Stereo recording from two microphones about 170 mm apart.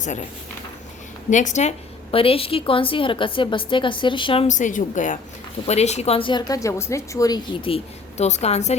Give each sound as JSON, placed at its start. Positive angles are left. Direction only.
{"t": 0.0, "sound": "a woman's voice", "side_deg": 45}
{"t": 1.3, "sound": "a woman's voice", "side_deg": 45}
{"t": 2.1, "sound": "a woman's voice", "side_deg": 35}
{"t": 4.4, "sound": "a woman's voice", "side_deg": 45}
{"t": 8.2, "sound": "a woman's voice", "side_deg": 40}